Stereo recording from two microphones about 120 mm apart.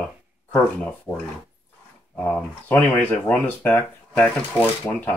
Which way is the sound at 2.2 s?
10° left (ahead or behind).